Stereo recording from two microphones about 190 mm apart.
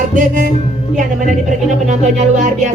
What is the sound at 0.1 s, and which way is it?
Speech, 45° right (ahead or behind).